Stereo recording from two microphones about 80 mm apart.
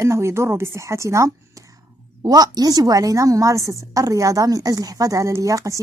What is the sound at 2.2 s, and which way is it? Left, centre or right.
A woman's voice, right.